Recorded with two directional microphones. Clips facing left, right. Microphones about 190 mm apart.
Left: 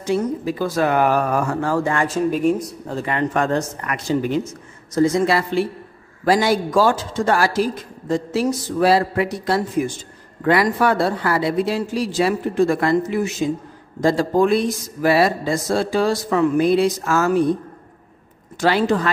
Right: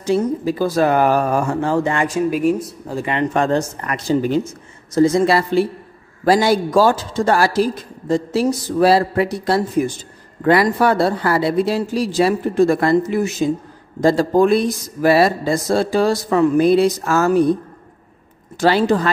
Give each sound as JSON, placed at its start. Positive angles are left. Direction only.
{"t": 0.0, "sound": "speech", "side_deg": -35}
{"t": 3.1, "sound": "speech", "side_deg": -25}
{"t": 18.6, "sound": "speech", "side_deg": -35}